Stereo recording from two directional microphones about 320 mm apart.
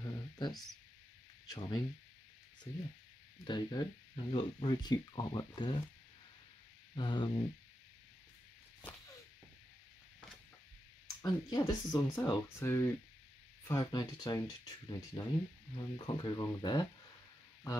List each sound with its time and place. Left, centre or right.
0.0 s a sound: centre
1.5 s speech: centre
3.4 s speech: centre
7.0 s speech: centre
11.2 s speech: centre